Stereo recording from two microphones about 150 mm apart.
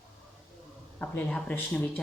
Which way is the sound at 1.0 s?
10° left (ahead or behind).